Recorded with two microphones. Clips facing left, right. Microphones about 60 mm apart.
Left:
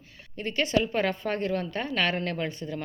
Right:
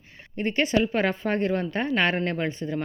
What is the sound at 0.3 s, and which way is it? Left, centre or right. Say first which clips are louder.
Speech: right 4 dB; right.